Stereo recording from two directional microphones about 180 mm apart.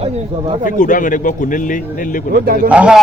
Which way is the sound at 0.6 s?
45° left (ahead or behind).